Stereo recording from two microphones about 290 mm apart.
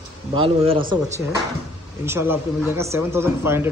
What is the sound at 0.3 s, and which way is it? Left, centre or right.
Speech, centre.